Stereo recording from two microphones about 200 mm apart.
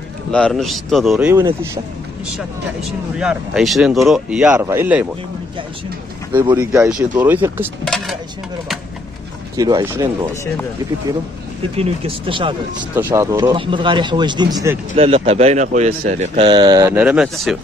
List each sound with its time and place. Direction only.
0.3 s speech: 5° left (ahead or behind)
3.2 s speech: 5° right (ahead or behind)
6.5 s speech: 10° right (ahead or behind)
7.8 s dishes: 5° left (ahead or behind)
9.6 s speech: 20° right (ahead or behind)
11.7 s speech: 30° right (ahead or behind)
12.9 s speech: 15° right (ahead or behind)
13.6 s speech: 25° right (ahead or behind)
15.0 s a man's voice: 30° right (ahead or behind)
17.0 s speech: 5° right (ahead or behind)